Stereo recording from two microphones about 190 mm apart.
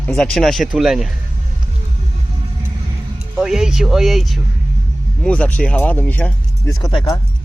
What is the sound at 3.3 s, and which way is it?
Speech, 5° right (ahead or behind).